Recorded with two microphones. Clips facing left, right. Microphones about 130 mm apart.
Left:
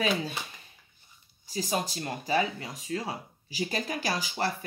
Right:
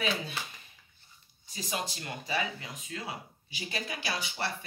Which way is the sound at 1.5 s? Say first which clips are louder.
Left 6 dB; 40° left (ahead or behind).